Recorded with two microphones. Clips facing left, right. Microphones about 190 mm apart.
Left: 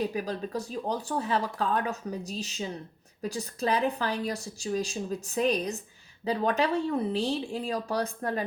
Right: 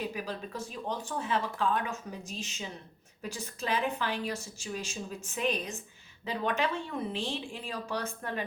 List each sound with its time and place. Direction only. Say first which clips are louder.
0.0 s speech: left 6 dB; 40° left (ahead or behind)